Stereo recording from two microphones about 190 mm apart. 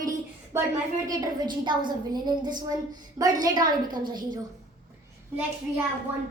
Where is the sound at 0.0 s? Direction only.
20° right (ahead or behind).